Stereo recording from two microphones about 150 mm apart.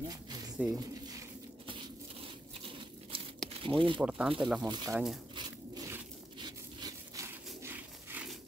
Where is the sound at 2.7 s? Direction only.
35° right (ahead or behind).